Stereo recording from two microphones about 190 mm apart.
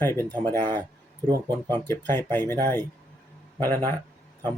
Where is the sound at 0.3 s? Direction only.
20° right (ahead or behind).